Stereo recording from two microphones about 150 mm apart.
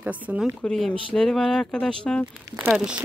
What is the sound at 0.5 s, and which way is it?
Speech, 5° left (ahead or behind).